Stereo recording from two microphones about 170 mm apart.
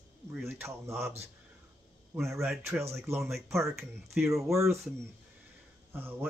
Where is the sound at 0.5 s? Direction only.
15° right (ahead or behind).